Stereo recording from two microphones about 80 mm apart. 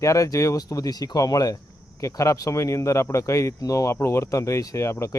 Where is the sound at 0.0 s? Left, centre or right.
Left.